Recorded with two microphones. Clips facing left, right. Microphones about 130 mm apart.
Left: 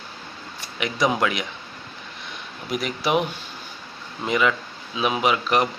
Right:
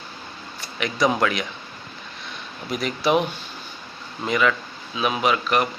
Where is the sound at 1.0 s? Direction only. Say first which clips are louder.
Right 1 dB; 10° left (ahead or behind).